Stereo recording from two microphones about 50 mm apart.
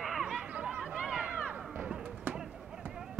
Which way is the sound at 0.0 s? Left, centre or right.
Centre.